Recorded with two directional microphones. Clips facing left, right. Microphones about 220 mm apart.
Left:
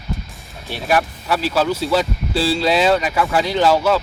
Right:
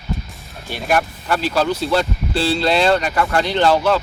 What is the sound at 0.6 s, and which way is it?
Speech, centre (ahead or behind).